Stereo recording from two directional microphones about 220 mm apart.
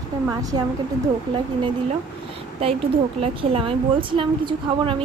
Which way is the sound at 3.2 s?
25° right (ahead or behind).